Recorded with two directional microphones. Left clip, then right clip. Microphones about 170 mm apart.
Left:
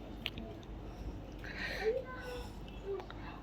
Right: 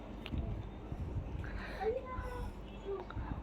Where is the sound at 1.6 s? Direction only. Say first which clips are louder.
Left 2 dB; centre (ahead or behind).